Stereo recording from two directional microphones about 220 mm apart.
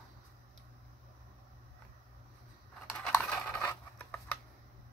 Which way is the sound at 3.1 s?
10° left (ahead or behind).